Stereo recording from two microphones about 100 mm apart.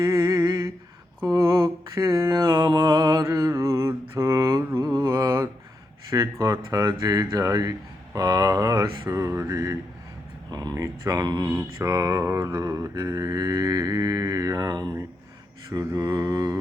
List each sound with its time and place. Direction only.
0.0 s a sound: 40° right (ahead or behind)
1.3 s mantra: 35° right (ahead or behind)
6.4 s speech: 40° right (ahead or behind)
10.5 s speech: 40° right (ahead or behind)
11.4 s speech: 35° right (ahead or behind)
12.5 s mantra: 40° right (ahead or behind)
15.7 s speech: 35° right (ahead or behind)